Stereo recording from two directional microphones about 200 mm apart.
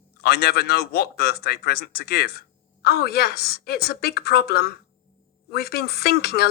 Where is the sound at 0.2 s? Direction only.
50° left (ahead or behind).